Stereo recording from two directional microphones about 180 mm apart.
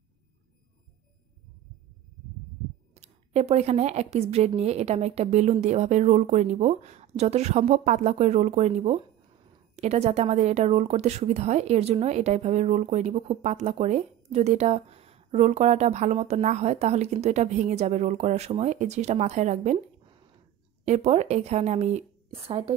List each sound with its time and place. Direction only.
2.9 s a woman's voice: 35° right (ahead or behind)
20.8 s speech: 35° right (ahead or behind)